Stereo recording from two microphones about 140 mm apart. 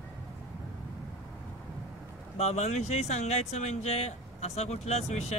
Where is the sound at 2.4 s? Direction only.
50° left (ahead or behind).